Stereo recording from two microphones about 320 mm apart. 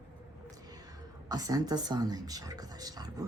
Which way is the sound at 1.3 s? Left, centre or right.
Centre.